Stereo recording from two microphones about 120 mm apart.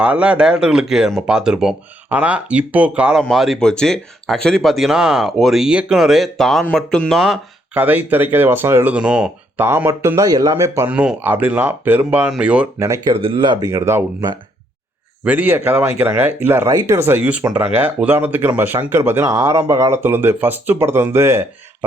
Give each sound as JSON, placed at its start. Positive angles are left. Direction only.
{"t": 0.0, "sound": "speech", "side_deg": -10}
{"t": 3.2, "sound": "speech", "side_deg": 0}
{"t": 7.2, "sound": "speech", "side_deg": -10}
{"t": 9.6, "sound": "speech", "side_deg": -20}
{"t": 10.8, "sound": "speech", "side_deg": -10}
{"t": 13.1, "sound": "speech", "side_deg": -50}
{"t": 13.7, "sound": "speech", "side_deg": -25}
{"t": 15.2, "sound": "speech", "side_deg": -15}